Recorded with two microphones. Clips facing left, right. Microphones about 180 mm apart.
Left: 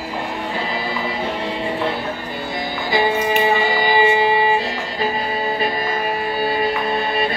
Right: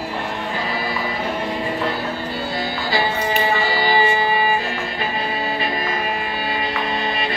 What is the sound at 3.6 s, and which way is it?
Music, 15° left (ahead or behind).